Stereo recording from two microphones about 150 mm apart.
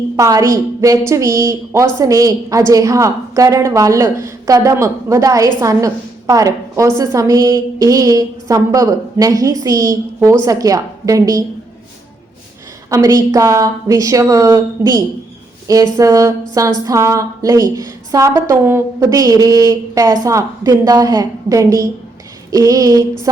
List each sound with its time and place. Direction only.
0.2 s a woman's voice: 20° right (ahead or behind)
12.9 s a woman's voice: 20° right (ahead or behind)